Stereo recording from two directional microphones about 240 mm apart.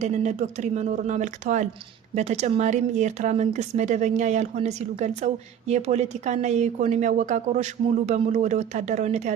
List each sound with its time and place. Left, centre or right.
0.0 s speech: right